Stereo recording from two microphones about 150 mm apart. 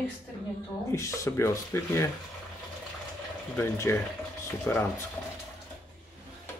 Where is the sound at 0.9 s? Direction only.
20° left (ahead or behind).